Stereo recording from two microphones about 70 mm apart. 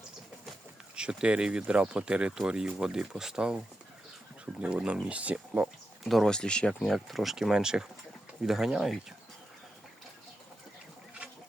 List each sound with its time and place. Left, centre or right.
0.9 s speech: centre
4.6 s speech: centre
6.1 s speech: centre